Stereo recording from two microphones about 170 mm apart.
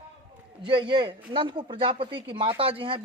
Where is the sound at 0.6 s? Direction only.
30° right (ahead or behind).